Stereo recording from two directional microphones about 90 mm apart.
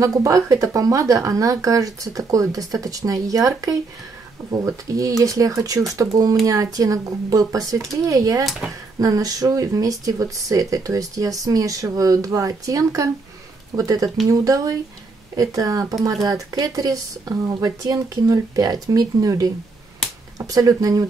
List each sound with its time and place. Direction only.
0.0 s speech: 35° right (ahead or behind)
8.5 s speech: 5° right (ahead or behind)
9.0 s speech: 40° right (ahead or behind)